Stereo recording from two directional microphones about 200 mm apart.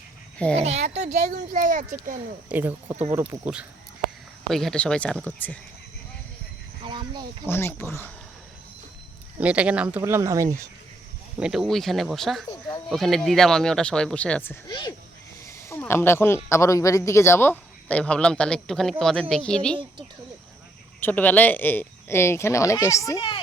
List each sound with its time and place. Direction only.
0.5 s speech: 35° right (ahead or behind)
2.5 s speech: 10° right (ahead or behind); by 5.5 s 10° left (ahead or behind)
6.8 s a sound: 20° right (ahead or behind)
7.4 s speech: 10° left (ahead or behind)
9.4 s speech: 5° right (ahead or behind)
11.3 s speech: 5° right (ahead or behind)
21.0 s speech: 10° left (ahead or behind)